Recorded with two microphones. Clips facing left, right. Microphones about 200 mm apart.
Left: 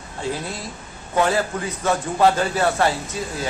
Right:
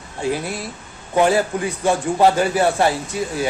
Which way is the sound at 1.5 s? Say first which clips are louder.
Right 3 dB; 10° right (ahead or behind).